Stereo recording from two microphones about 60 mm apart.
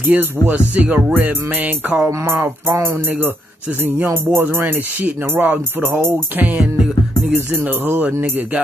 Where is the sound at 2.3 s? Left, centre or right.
Right.